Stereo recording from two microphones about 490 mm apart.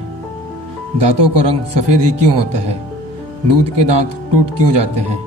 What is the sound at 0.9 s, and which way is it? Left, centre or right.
A man's voice, right.